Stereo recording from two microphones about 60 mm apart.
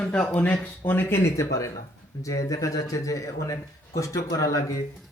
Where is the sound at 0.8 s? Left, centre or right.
Left.